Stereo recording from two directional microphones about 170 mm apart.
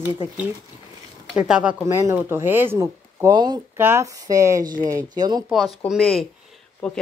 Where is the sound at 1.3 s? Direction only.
5° right (ahead or behind); by 5.4 s 25° right (ahead or behind).